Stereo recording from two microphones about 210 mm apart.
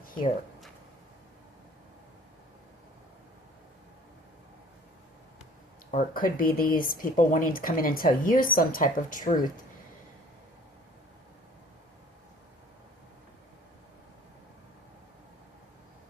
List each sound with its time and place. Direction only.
5.9 s speech: 40° left (ahead or behind)